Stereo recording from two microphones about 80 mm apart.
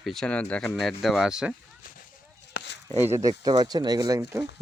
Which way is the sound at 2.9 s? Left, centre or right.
Right.